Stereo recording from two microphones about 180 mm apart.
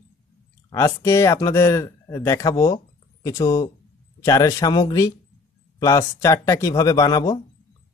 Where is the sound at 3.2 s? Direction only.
20° left (ahead or behind).